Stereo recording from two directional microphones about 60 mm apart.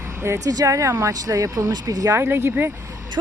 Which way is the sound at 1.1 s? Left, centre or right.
Right.